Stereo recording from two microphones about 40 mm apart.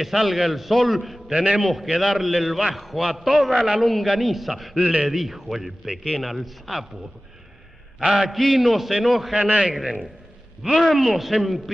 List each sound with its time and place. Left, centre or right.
0.0 s a man's voice: centre
1.3 s a man's voice: centre
1.6 s a man's voice: centre
3.8 s a man's voice: centre
8.0 s a man's voice: centre
8.3 s a man's voice: centre
9.4 s a man's voice: right
10.6 s a man's voice: centre
10.9 s a man's voice: centre